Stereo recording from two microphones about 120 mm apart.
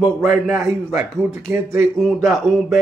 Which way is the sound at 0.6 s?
20° right (ahead or behind).